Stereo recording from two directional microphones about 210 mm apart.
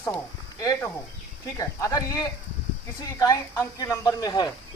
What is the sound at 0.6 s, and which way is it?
Speech, 15° left (ahead or behind).